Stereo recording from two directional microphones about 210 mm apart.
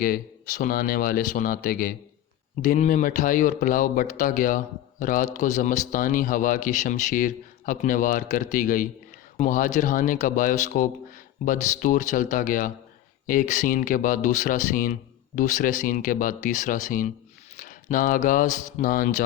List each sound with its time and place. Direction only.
0.0 s speech: 40° left (ahead or behind)